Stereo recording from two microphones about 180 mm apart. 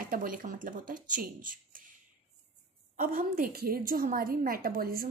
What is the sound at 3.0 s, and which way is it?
A woman's voice, 50° right (ahead or behind).